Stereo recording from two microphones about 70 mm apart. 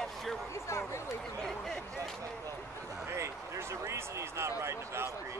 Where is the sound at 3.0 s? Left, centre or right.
Right.